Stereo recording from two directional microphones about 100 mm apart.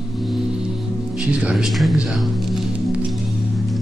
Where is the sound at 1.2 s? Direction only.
10° right (ahead or behind).